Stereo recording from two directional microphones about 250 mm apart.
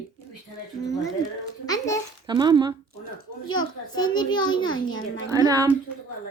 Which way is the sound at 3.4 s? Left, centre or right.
Left.